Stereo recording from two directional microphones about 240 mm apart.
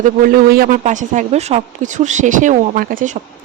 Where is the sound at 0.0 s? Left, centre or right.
Right.